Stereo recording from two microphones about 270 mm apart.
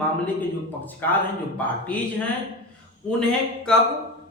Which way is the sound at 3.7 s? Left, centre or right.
Centre.